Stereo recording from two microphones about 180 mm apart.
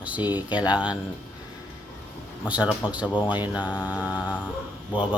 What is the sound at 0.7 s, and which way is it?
Speech, 5° right (ahead or behind).